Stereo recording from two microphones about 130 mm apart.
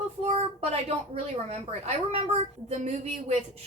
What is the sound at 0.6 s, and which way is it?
A woman's voice, 55° right (ahead or behind).